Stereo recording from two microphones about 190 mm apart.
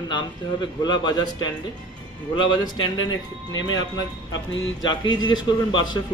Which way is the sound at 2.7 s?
90° left.